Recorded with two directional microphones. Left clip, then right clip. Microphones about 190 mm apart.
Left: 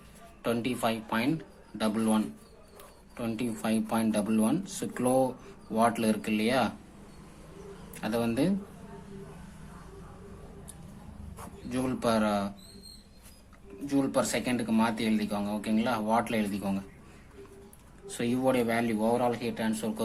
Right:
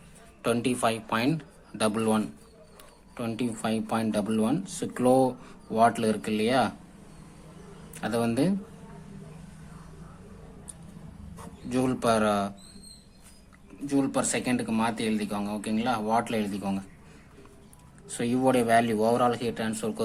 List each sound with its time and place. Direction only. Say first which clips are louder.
0.4 s speech: right 4 dB; 20° right (ahead or behind)
7.9 s speech: right 2 dB; 15° right (ahead or behind)
11.7 s speech: right 4 dB; 20° right (ahead or behind)
13.8 s speech: right 1 dB; 10° right (ahead or behind)
18.1 s speech: right 3 dB; 15° right (ahead or behind)